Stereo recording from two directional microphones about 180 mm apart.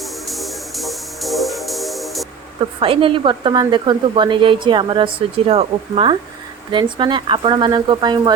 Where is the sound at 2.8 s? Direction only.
30° right (ahead or behind).